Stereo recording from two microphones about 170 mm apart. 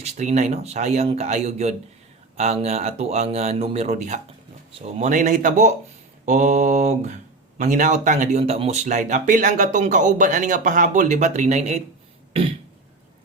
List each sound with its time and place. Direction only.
0.0 s speech: 40° right (ahead or behind)